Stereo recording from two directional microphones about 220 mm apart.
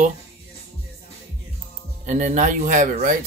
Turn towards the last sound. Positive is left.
turn(degrees=-40)  # may be behind; listen again after turning